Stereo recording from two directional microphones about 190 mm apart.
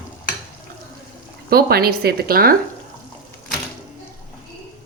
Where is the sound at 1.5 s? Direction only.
55° right (ahead or behind).